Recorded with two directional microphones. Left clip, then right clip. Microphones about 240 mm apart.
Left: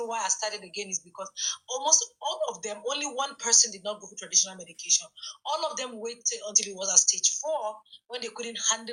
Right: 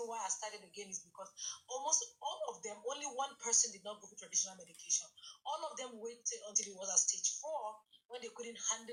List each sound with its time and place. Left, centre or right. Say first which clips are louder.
0.1 s speech: left 12 dB; left